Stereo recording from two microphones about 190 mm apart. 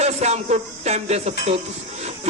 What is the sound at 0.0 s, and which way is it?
A man's voice, 35° right (ahead or behind).